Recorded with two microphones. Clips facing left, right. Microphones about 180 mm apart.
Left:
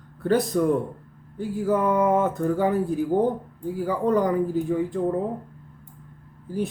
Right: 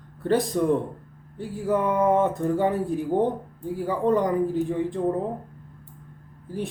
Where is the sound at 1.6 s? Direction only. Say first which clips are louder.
Left 1 dB; centre (ahead or behind).